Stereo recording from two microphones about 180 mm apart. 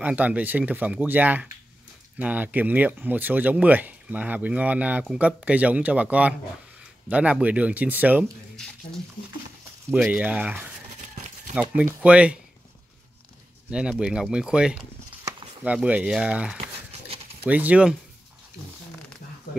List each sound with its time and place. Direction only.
0.0 s speech: 10° right (ahead or behind)
8.5 s speech: 5° left (ahead or behind)
10.0 s speech: 10° right (ahead or behind)
11.0 s a sound: 40° right (ahead or behind)
11.7 s speech: 5° right (ahead or behind)
13.7 s speech: 5° right (ahead or behind)